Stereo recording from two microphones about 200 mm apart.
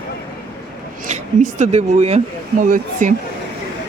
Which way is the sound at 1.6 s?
35° right (ahead or behind).